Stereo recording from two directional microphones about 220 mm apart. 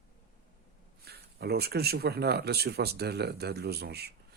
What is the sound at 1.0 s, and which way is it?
Speech, 45° right (ahead or behind).